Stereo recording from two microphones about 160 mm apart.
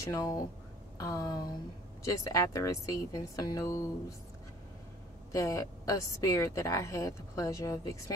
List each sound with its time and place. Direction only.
0.0 s a woman's voice: 20° left (ahead or behind)
5.3 s a woman's voice: 20° left (ahead or behind)